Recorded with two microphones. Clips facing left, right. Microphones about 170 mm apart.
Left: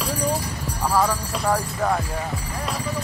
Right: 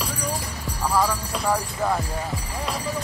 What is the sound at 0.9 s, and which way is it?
Speech, centre (ahead or behind).